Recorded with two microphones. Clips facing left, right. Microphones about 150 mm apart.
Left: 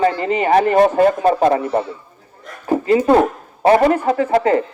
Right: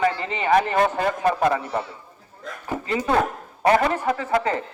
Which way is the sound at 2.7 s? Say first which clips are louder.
Left 10 dB; 40° left (ahead or behind).